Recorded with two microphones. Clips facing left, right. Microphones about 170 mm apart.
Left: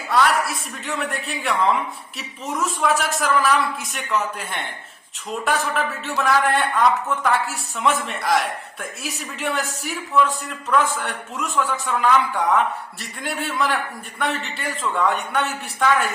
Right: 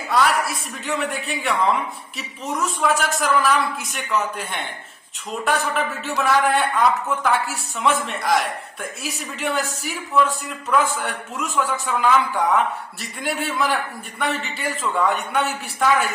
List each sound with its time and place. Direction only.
0.1 s a man's voice: centre (ahead or behind)